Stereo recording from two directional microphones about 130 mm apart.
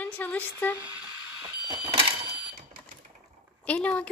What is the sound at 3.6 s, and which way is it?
Speech, 10° left (ahead or behind).